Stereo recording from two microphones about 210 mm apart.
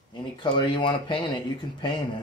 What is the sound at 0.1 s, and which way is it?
Speech, 20° left (ahead or behind).